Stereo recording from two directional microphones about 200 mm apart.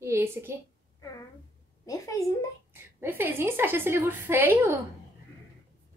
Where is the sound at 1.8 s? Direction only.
15° left (ahead or behind).